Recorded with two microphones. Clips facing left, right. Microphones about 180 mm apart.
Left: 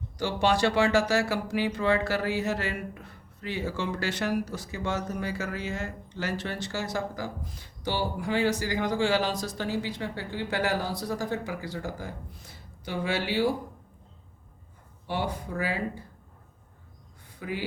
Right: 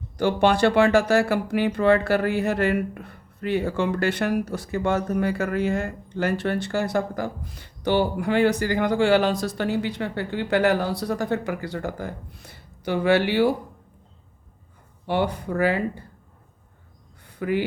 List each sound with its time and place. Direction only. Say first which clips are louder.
0.2 s speech: right 6 dB; 60° right (ahead or behind)
15.0 s speech: right 7 dB; 65° right (ahead or behind)
17.2 s a sound: right 9 dB; 60° right (ahead or behind)